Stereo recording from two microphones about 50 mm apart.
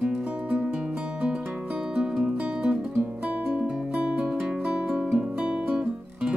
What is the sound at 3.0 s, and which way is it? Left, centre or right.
Music, right.